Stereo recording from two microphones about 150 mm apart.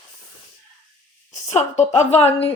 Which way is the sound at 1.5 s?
50° left (ahead or behind).